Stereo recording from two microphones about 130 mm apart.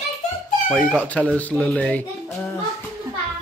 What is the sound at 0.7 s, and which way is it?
Speech, 10° left (ahead or behind).